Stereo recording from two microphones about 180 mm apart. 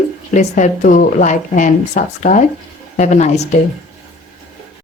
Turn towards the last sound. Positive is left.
turn(degrees=40)  # may be behind; listen again after turning